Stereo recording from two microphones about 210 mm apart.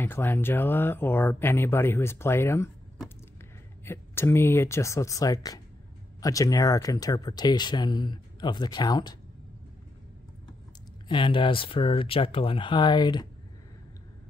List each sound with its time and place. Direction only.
0.0 s speech: 10° left (ahead or behind)
3.8 s speech: 10° left (ahead or behind)
11.1 s speech: 25° left (ahead or behind)